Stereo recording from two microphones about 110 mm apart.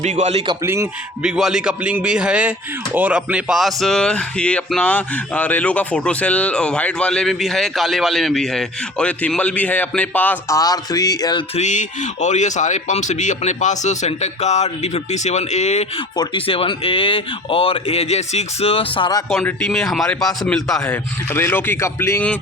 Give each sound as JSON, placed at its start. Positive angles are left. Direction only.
{"t": 0.0, "sound": "a man's voice", "side_deg": -90}
{"t": 0.6, "sound": "a man's voice", "side_deg": -25}
{"t": 1.2, "sound": "speech", "side_deg": -5}
{"t": 10.5, "sound": "speech", "side_deg": 35}
{"t": 12.2, "sound": "speech", "side_deg": 90}
{"t": 16.1, "sound": "speech", "side_deg": 50}
{"t": 19.6, "sound": "speech", "side_deg": 5}
{"t": 20.8, "sound": "speech", "side_deg": 15}